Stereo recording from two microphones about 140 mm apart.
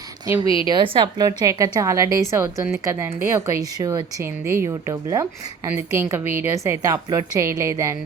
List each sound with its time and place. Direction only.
0.4 s a woman's voice: 40° left (ahead or behind)
0.7 s a woman's voice: 35° right (ahead or behind); by 7.9 s 20° right (ahead or behind)